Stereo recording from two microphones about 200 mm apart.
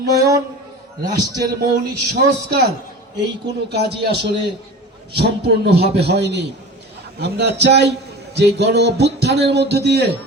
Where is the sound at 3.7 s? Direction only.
55° right (ahead or behind).